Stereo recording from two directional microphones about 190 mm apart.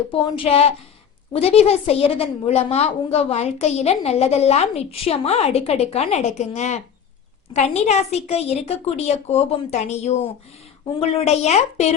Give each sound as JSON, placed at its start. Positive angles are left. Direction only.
{"t": 0.1, "sound": "a woman's voice", "side_deg": 25}